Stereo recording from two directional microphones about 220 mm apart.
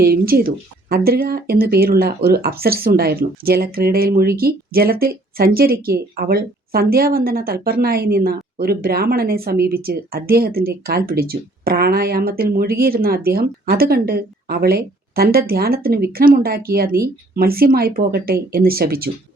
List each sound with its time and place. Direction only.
0.0 s speech: 45° right (ahead or behind)